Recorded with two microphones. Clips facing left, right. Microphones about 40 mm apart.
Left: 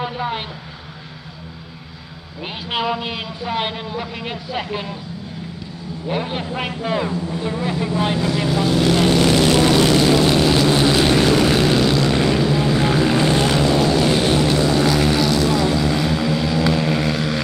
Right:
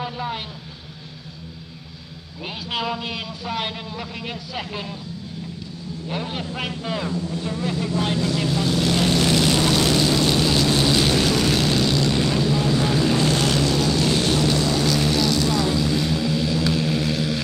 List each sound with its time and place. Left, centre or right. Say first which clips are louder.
0.0 s vehicle: left 4 dB; left
2.4 s a man's voice: left 4 dB; left
6.0 s a man's voice: left 5 dB; left
9.9 s vehicle: left 5 dB; centre